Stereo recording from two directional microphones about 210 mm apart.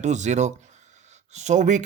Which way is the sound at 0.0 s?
35° right (ahead or behind).